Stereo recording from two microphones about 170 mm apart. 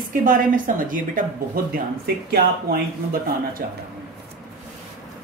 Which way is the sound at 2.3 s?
65° right (ahead or behind).